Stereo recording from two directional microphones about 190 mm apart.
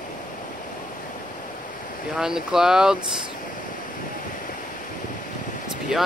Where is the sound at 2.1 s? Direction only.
5° right (ahead or behind).